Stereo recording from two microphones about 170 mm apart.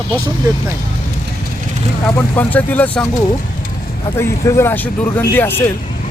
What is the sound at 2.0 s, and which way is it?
Speech, 10° left (ahead or behind).